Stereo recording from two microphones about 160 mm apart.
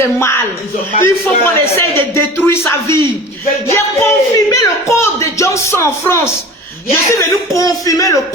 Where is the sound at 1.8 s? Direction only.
15° left (ahead or behind).